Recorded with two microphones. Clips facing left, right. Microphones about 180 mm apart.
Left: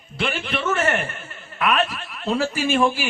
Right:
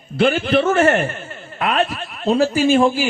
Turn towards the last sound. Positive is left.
turn(degrees=-30)  # may be behind; listen again after turning